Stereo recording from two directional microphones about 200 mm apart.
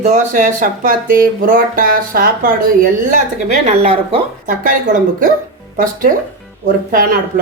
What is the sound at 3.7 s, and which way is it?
Speech, 30° right (ahead or behind).